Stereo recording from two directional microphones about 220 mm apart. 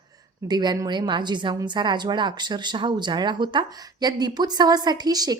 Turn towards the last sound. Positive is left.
turn(degrees=-15)  # may be behind; listen again after turning